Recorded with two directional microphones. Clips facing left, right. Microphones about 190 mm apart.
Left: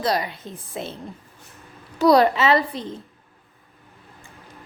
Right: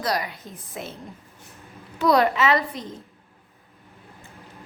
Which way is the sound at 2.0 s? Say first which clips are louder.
Left 3 dB; 35° left (ahead or behind).